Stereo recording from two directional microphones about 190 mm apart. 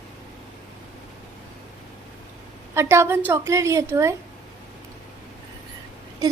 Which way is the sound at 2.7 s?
15° right (ahead or behind).